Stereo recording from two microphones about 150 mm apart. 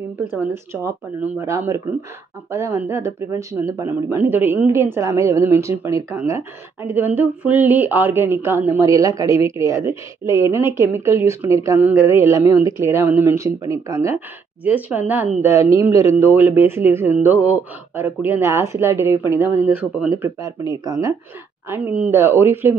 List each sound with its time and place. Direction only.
0.8 s speech: 20° right (ahead or behind)
20.2 s speech: 20° right (ahead or behind)